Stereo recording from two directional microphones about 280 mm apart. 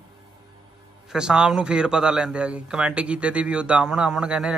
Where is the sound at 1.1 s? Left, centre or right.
Centre.